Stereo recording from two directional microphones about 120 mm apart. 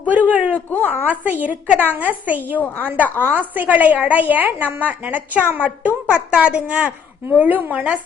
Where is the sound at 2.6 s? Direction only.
15° left (ahead or behind).